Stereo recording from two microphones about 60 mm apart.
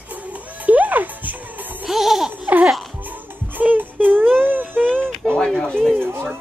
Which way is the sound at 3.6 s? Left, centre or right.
Right.